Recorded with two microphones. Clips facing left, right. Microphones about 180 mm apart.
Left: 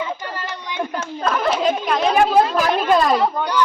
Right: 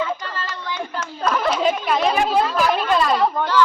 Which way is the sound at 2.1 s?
45° left (ahead or behind).